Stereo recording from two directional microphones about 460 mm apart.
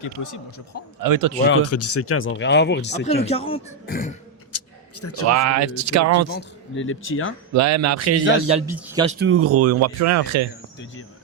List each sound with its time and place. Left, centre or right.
0.0 s speech: left
1.0 s speech: right
1.5 s speech: left
4.5 s a sound: left
5.3 s speech: right
6.3 s speech: left
7.5 s speech: right
8.7 s speech: centre
9.0 s speech: right